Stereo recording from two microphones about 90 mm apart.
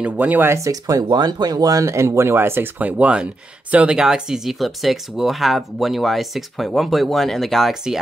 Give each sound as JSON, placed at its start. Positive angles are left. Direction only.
{"t": 0.0, "sound": "speech", "side_deg": -20}
{"t": 0.6, "sound": "speech", "side_deg": -40}